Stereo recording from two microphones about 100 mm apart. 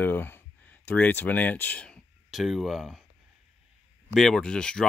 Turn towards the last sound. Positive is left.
turn(degrees=10)  # may be behind; listen again after turning